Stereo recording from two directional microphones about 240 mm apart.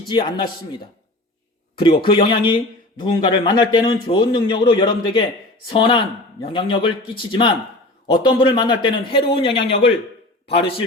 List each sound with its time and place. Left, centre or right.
0.1 s a man's voice: centre
2.0 s a man's voice: centre